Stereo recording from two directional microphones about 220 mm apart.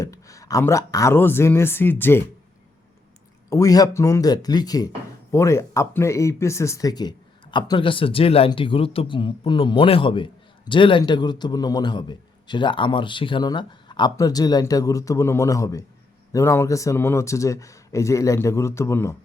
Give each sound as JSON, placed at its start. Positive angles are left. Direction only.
{"t": 0.0, "sound": "speech", "side_deg": 15}
{"t": 3.5, "sound": "speech", "side_deg": 15}